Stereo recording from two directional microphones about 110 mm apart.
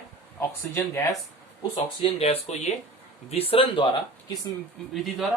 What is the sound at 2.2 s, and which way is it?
Speech, 70° left (ahead or behind).